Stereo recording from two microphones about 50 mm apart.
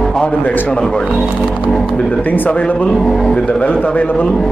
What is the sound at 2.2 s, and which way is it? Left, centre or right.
Speech, left.